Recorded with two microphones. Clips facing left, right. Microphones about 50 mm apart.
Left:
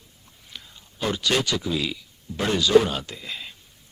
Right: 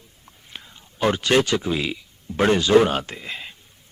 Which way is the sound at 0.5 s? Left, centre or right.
Right.